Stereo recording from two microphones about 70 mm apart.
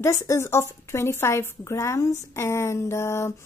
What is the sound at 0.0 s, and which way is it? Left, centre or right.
A woman's voice, left.